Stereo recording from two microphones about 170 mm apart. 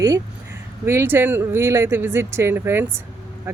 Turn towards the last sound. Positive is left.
turn(degrees=-15)  # may be behind; listen again after turning